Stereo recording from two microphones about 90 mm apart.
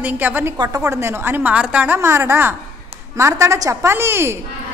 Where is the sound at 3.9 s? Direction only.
25° right (ahead or behind).